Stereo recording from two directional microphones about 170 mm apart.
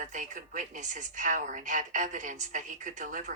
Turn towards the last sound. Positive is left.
turn(degrees=-50)  # may be behind; listen again after turning